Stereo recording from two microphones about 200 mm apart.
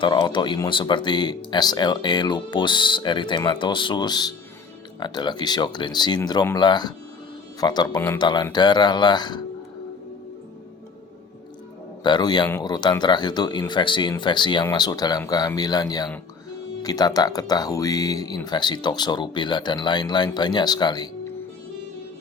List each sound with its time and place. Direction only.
0.0 s speech: 25° left (ahead or behind)
12.0 s speech: 20° left (ahead or behind)